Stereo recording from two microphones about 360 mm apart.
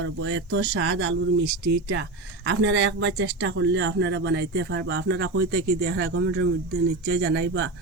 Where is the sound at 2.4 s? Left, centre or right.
Right.